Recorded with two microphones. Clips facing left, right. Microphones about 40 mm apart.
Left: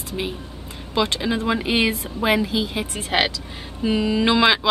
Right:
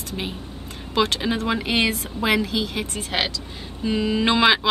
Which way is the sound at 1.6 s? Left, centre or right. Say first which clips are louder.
Left 1 dB; centre.